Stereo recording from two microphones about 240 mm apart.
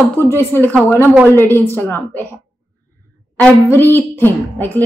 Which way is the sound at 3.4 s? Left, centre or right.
Centre.